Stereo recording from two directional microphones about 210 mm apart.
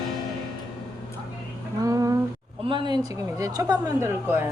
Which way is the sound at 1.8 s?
15° right (ahead or behind).